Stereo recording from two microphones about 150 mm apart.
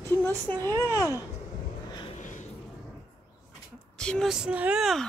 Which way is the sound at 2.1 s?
55° left (ahead or behind).